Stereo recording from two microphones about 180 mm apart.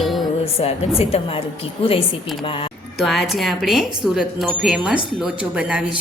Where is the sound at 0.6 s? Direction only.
35° left (ahead or behind).